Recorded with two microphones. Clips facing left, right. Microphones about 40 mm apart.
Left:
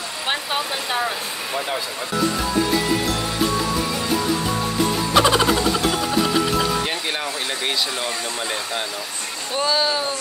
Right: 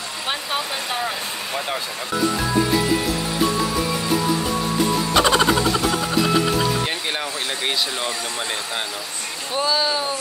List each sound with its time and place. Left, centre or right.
5.1 s music: centre
9.6 s speech: centre